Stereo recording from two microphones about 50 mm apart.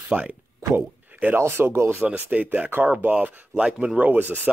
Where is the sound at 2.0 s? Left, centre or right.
Right.